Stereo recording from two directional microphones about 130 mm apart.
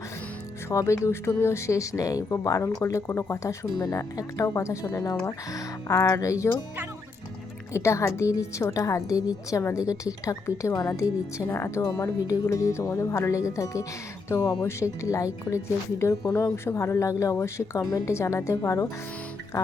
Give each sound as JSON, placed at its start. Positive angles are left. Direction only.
{"t": 0.7, "sound": "speech", "side_deg": 25}
{"t": 7.7, "sound": "speech", "side_deg": 20}